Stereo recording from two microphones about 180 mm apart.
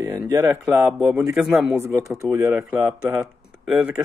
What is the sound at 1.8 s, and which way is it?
Speech, 15° right (ahead or behind).